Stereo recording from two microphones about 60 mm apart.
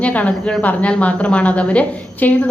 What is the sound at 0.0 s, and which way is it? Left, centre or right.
A woman's voice, left.